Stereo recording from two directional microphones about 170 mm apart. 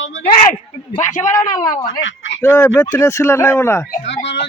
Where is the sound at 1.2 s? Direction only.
20° left (ahead or behind).